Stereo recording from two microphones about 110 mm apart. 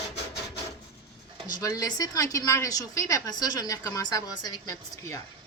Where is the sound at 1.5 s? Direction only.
35° left (ahead or behind).